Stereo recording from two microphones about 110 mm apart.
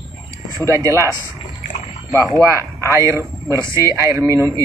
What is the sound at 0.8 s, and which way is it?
Speech, 25° right (ahead or behind).